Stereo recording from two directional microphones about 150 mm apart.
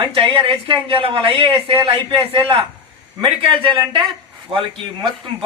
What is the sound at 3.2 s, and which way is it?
A man's voice, 35° right (ahead or behind).